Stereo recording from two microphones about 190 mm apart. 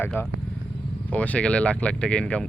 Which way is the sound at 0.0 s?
10° left (ahead or behind).